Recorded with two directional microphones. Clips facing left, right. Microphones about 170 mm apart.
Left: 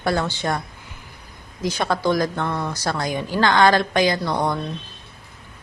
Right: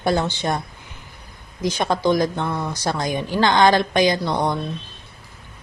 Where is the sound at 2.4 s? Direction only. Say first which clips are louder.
Even; 10° right (ahead or behind).